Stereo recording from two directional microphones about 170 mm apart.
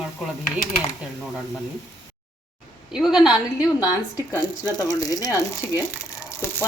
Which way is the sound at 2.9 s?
5° right (ahead or behind).